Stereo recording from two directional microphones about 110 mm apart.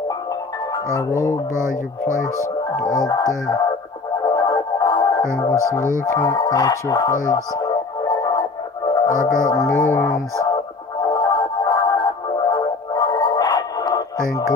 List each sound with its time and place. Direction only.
1.5 s music: 25° right (ahead or behind)
2.7 s speech: 30° left (ahead or behind)
4.2 s music: 35° left (ahead or behind)
5.7 s music: 30° right (ahead or behind)
6.0 s speech: 30° left (ahead or behind)
7.5 s music: 35° left (ahead or behind)
9.8 s music: 25° left (ahead or behind)